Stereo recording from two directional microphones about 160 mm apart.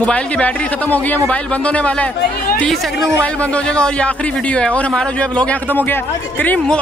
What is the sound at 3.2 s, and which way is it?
A man's voice, 5° left (ahead or behind).